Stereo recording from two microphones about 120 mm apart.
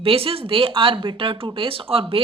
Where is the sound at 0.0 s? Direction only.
50° right (ahead or behind).